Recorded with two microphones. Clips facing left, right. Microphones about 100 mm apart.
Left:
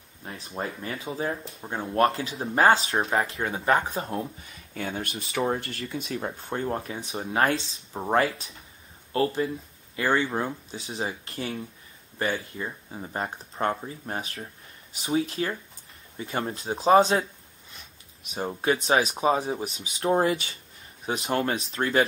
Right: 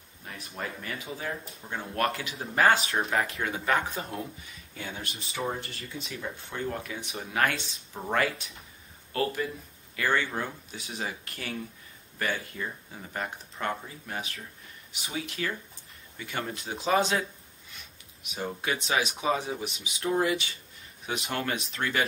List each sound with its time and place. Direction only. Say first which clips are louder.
0.2 s speech: left 4 dB; 30° left (ahead or behind)
4.8 s speech: left 6 dB; 50° left (ahead or behind)
5.1 s speech: left 6 dB; 75° left (ahead or behind)
5.9 s speech: left 5 dB; 50° left (ahead or behind)